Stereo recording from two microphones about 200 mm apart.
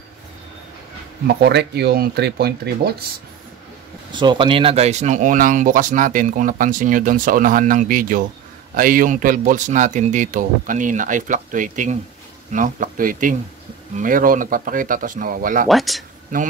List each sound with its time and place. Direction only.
1.2 s speech: 55° right (ahead or behind)
4.1 s speech: 25° right (ahead or behind); by 15.7 s 45° right (ahead or behind)
15.7 s speech: centre (ahead or behind)